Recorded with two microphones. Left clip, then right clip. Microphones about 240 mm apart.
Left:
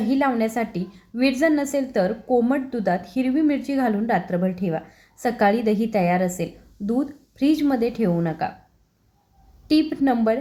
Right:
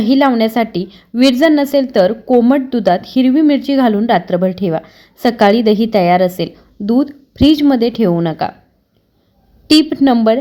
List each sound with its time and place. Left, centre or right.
0.0 s a woman's voice: right
9.6 s a woman's voice: right